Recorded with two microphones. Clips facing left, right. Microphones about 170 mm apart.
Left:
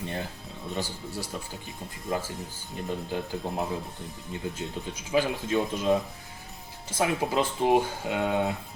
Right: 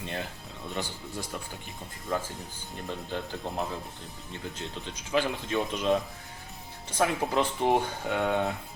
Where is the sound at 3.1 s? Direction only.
15° left (ahead or behind).